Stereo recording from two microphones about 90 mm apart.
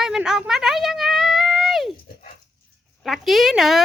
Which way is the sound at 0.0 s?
5° right (ahead or behind).